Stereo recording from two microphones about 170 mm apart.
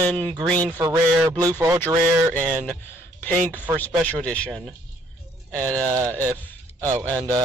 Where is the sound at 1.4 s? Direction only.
20° right (ahead or behind).